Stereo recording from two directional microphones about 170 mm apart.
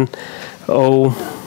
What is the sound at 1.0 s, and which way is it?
Speech, 20° left (ahead or behind).